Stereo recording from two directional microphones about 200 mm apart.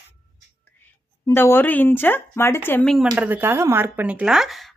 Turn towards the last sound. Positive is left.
turn(degrees=0)  # may be behind; listen again after turning